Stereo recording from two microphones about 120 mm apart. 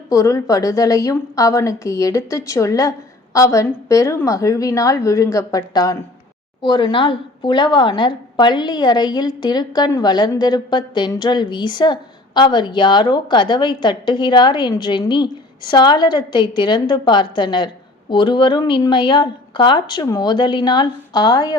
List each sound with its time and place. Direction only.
0.1 s a woman's voice: 25° left (ahead or behind)